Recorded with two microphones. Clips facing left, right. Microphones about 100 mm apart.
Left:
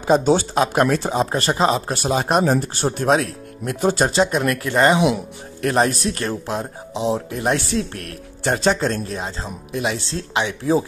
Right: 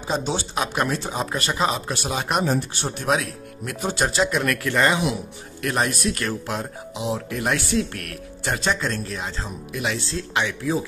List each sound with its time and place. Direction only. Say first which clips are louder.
0.0 s speech: left 10 dB; 45° left (ahead or behind)
1.1 s speech: left 6 dB; 35° left (ahead or behind)